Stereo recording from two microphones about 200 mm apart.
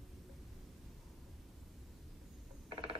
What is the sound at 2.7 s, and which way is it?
Mechanisms, 25° right (ahead or behind).